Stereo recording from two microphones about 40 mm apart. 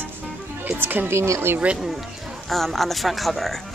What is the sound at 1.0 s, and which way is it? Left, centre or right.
Speech, right.